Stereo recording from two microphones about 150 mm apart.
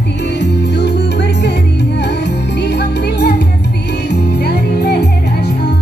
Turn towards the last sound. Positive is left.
turn(degrees=90)